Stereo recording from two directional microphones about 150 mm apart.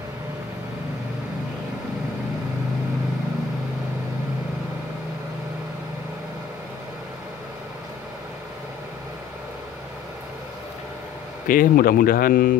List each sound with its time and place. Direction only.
11.4 s speech: 75° left (ahead or behind)